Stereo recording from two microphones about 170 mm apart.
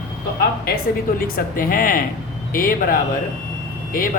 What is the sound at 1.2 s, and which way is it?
Speech, 55° left (ahead or behind).